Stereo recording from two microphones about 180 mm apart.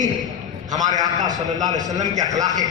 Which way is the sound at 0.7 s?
20° right (ahead or behind).